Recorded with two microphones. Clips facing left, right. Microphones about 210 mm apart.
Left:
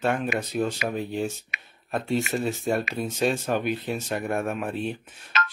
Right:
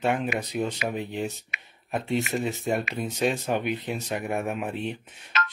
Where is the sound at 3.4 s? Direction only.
15° right (ahead or behind).